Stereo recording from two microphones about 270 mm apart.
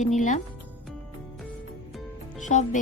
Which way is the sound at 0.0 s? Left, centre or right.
Left.